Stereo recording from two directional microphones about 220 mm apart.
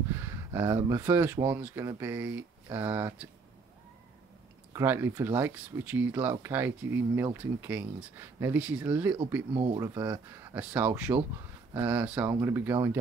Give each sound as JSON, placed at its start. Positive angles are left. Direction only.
{"t": 0.1, "sound": "speech", "side_deg": -10}
{"t": 4.7, "sound": "speech", "side_deg": -10}
{"t": 9.5, "sound": "speech", "side_deg": -25}
{"t": 9.8, "sound": "speech", "side_deg": -10}